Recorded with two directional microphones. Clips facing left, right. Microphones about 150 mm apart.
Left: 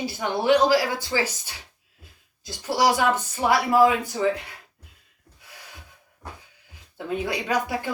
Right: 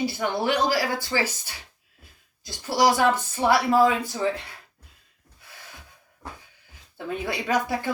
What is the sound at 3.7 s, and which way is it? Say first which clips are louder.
Speech: left 1 dB; 15° left (ahead or behind).